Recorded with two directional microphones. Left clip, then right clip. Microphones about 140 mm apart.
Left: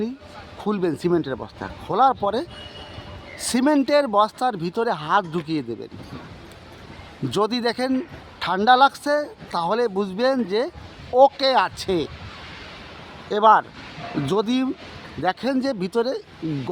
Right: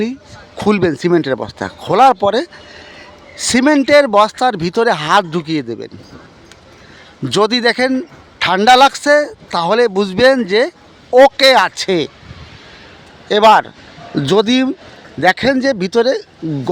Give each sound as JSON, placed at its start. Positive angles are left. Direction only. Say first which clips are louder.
{"t": 0.8, "sound": "a man's voice", "louder": "right 5 dB", "side_deg": -25}
{"t": 5.4, "sound": "a man's voice", "louder": "right 7 dB", "side_deg": -25}
{"t": 7.3, "sound": "a man's voice", "louder": "right 9 dB", "side_deg": -30}
{"t": 13.2, "sound": "a man's voice", "louder": "right 7 dB", "side_deg": -30}